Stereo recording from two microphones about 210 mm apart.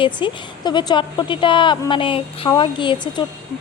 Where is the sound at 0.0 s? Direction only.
20° left (ahead or behind).